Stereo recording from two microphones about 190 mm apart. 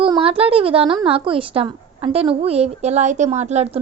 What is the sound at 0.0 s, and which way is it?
A woman's voice, 30° right (ahead or behind).